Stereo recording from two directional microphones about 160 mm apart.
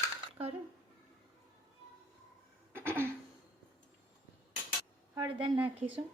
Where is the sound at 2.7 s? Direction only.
15° right (ahead or behind).